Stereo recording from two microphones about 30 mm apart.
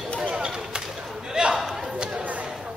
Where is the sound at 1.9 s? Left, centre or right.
Right.